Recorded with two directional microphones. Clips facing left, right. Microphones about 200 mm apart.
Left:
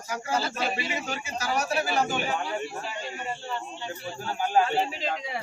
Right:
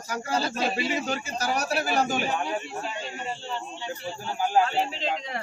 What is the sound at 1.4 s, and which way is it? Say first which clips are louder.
Speech: left 1 dB; 40° right (ahead or behind).